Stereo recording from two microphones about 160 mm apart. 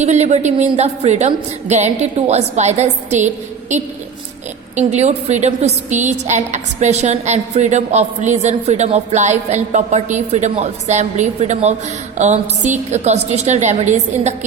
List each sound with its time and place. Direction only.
0.0 s a woman's voice: 45° right (ahead or behind)